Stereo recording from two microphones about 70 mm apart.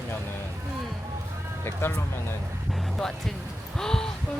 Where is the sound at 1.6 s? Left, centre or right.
Left.